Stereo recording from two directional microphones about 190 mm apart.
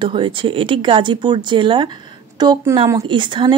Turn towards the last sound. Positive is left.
turn(degrees=-25)  # may be behind; listen again after turning